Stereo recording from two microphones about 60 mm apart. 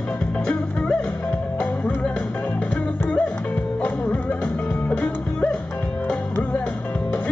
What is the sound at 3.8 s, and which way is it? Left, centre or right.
Music, left.